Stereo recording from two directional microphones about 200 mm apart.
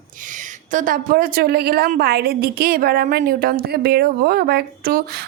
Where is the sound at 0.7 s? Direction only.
40° right (ahead or behind).